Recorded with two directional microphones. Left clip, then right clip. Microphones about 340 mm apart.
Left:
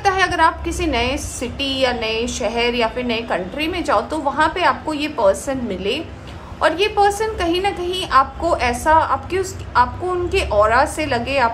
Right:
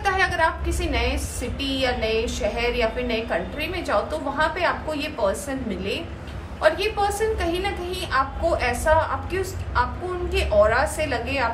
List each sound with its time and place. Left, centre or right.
0.0 s a woman's voice: centre
6.6 s a woman's voice: left